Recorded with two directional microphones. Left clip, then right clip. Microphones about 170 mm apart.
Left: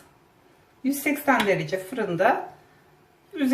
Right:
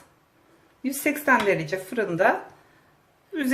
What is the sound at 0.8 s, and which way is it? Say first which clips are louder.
Speech: even; 50° right (ahead or behind).